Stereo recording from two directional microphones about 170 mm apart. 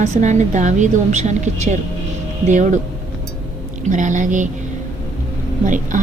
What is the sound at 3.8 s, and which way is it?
Speech, 45° right (ahead or behind).